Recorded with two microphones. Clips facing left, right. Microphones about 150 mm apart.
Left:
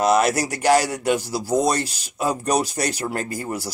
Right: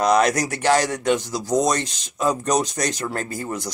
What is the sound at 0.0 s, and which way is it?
Speech, 5° left (ahead or behind).